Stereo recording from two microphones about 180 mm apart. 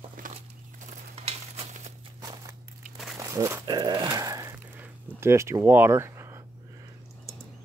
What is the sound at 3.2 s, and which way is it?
Speech, 15° right (ahead or behind).